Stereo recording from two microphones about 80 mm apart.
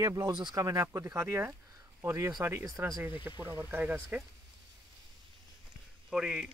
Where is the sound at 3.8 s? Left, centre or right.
Centre.